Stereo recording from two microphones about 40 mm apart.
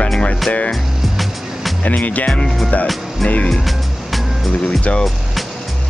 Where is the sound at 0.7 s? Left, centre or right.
Centre.